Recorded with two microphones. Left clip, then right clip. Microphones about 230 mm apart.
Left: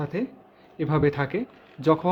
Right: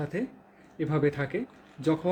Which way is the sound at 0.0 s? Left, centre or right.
Centre.